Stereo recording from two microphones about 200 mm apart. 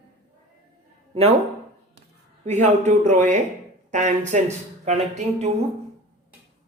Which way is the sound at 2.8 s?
35° right (ahead or behind).